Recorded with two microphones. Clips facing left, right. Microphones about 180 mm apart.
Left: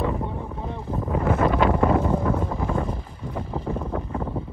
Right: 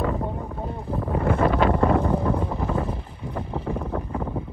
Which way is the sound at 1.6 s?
5° left (ahead or behind).